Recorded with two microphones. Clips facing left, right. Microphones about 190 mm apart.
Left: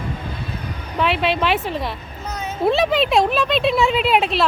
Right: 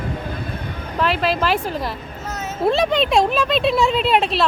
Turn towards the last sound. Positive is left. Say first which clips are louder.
# even
turn(degrees=0)  # may be behind; listen again after turning